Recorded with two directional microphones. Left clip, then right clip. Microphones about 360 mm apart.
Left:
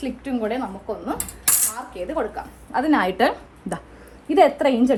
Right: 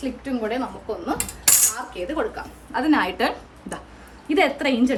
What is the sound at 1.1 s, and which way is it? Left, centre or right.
Coin, centre.